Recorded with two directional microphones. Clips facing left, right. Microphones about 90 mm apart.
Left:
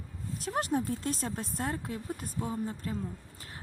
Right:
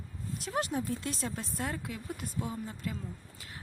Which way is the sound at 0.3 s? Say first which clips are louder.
Left 3 dB; 40° left (ahead or behind).